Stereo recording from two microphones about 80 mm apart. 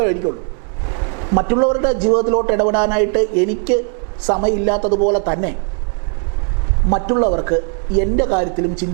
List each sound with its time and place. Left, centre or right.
0.0 s a man's voice: right
6.9 s a man's voice: right